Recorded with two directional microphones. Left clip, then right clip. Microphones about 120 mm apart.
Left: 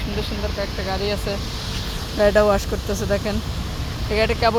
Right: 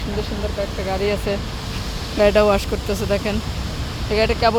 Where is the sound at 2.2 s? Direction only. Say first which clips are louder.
Right 1 dB; 25° right (ahead or behind).